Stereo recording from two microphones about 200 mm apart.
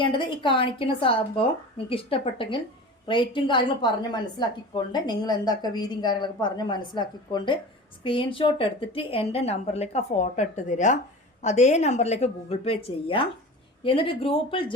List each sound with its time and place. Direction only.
0.0 s a woman's voice: 25° left (ahead or behind)